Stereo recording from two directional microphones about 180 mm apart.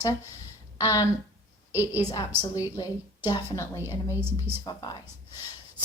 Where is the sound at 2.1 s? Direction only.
20° left (ahead or behind).